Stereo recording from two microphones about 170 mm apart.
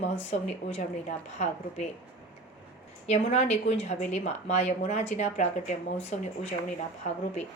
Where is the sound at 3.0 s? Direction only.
40° left (ahead or behind).